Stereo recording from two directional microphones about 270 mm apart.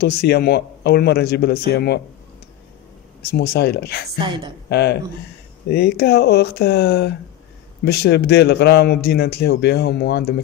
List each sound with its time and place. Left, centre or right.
0.0 s a man's voice: left
3.2 s a man's voice: left
4.2 s a woman's voice: centre
4.6 s a man's voice: left